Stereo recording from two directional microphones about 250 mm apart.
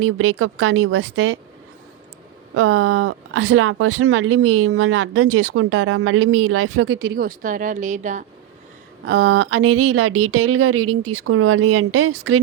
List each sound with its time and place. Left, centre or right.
0.0 s speech: right
2.6 s speech: right
9.0 s speech: right
9.3 s speech: right